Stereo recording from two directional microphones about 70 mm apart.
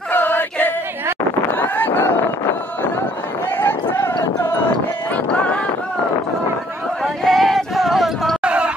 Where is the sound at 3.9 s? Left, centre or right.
Left.